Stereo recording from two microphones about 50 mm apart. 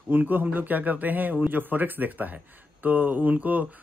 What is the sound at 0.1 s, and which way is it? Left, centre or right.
Speech, right.